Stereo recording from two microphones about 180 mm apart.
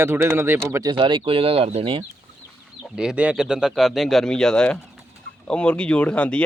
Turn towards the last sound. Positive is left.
turn(degrees=5)  # may be behind; listen again after turning